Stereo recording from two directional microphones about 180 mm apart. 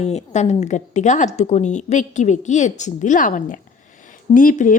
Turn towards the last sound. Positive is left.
turn(degrees=50)  # may be behind; listen again after turning